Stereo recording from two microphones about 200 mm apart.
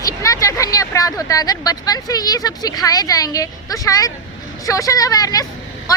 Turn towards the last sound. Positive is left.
turn(degrees=20)  # may be behind; listen again after turning